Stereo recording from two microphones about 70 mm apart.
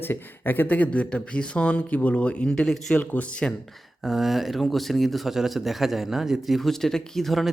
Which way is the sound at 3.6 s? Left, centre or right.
Centre.